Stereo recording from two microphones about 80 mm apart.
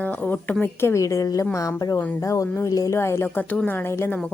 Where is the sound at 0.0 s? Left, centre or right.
Left.